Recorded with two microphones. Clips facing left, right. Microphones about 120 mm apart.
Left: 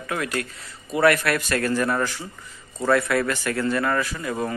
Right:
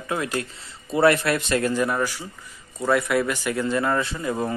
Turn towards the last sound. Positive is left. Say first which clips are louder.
# right 1 dB
turn(degrees=-15)  # may be behind; listen again after turning